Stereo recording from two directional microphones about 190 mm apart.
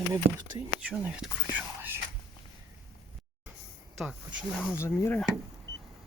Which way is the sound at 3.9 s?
5° right (ahead or behind).